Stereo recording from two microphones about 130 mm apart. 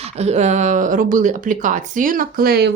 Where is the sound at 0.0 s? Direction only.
55° right (ahead or behind); by 2.2 s 90° right.